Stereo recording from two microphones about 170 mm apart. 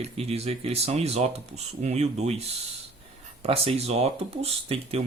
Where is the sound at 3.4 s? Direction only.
35° right (ahead or behind).